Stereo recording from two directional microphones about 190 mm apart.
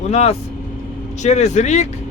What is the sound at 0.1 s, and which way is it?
Speech, 35° left (ahead or behind).